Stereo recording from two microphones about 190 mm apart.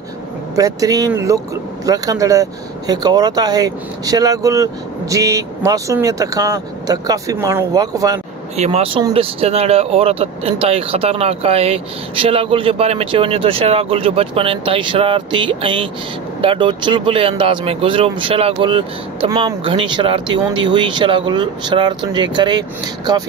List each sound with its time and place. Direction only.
0.6 s speech: 20° right (ahead or behind)
8.5 s speech: 35° right (ahead or behind)